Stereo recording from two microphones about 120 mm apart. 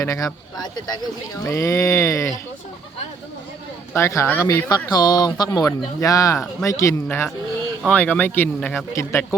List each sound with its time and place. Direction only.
0.0 s speech: 30° left (ahead or behind)
3.9 s speech: 20° left (ahead or behind)